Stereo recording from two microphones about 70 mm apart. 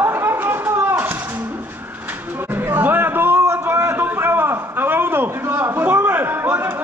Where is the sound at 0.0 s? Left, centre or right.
Right.